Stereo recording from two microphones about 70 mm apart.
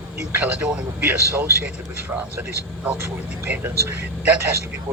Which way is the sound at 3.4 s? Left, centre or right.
Right.